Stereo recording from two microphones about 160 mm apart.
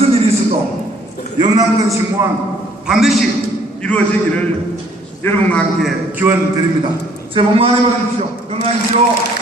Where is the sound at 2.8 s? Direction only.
Centre (ahead or behind).